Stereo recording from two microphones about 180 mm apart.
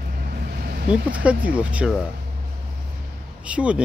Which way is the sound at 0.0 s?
55° right (ahead or behind).